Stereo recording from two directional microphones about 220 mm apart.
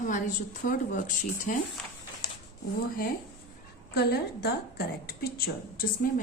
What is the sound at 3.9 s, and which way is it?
A woman's voice, 45° left (ahead or behind).